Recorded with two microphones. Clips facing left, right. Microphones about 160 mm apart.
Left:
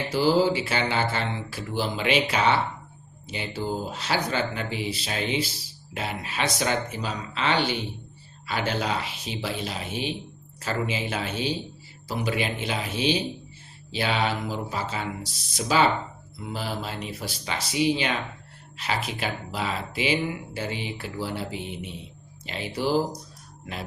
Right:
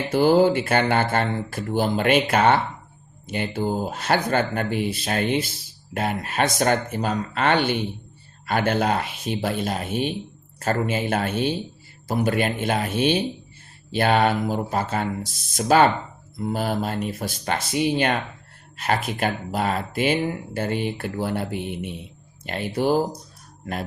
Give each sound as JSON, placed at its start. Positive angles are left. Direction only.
{"t": 0.1, "sound": "speech", "side_deg": -55}